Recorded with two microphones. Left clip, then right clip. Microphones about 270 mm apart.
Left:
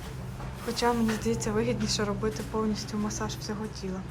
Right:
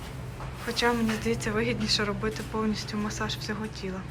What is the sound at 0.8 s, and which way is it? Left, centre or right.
Speech, centre.